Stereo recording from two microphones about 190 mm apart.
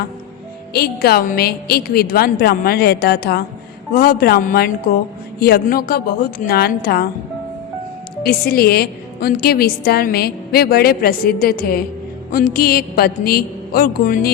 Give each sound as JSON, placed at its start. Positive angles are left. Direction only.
{"t": 0.7, "sound": "a woman's voice", "side_deg": 55}
{"t": 8.2, "sound": "a woman's voice", "side_deg": 55}